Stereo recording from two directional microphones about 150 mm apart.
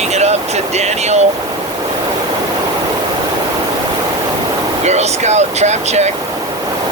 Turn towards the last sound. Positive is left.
turn(degrees=-50)  # may be behind; listen again after turning